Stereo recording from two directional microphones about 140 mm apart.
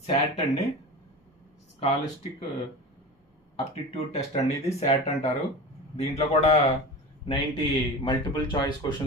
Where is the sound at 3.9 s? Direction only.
50° left (ahead or behind).